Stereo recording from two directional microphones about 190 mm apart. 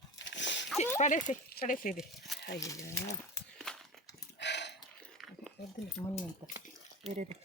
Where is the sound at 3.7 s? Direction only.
5° left (ahead or behind).